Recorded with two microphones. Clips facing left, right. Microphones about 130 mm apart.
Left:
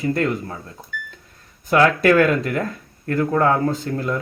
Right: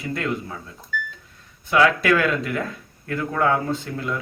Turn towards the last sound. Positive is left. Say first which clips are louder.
# left 4 dB
turn(degrees=40)  # may be behind; listen again after turning